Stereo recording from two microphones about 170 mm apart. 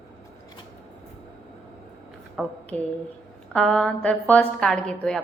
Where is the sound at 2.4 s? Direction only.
Centre (ahead or behind).